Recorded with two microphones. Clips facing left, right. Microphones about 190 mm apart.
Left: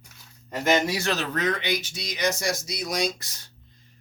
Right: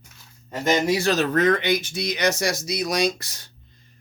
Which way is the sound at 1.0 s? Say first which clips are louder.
Right 7 dB; 45° right (ahead or behind).